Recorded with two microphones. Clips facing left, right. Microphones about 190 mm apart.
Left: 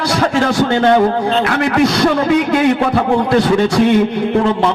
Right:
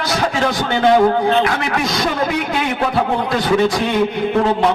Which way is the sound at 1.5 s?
65° left (ahead or behind).